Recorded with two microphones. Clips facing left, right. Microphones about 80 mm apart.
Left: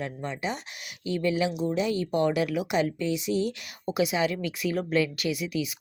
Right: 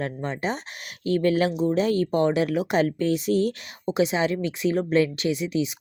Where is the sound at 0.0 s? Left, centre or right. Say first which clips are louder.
Right 4 dB; right.